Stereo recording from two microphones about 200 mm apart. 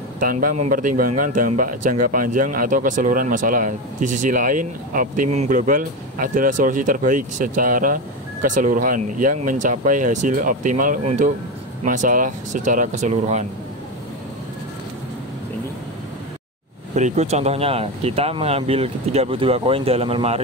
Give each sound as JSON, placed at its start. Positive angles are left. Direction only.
{"t": 0.2, "sound": "a man's voice", "side_deg": -45}
{"t": 16.9, "sound": "speech", "side_deg": -35}